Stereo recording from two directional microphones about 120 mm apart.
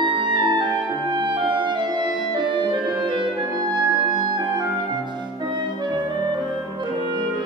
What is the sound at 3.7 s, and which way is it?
Music, 35° right (ahead or behind).